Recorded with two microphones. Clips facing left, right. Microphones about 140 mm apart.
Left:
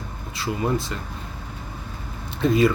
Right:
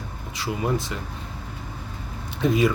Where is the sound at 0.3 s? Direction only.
15° right (ahead or behind).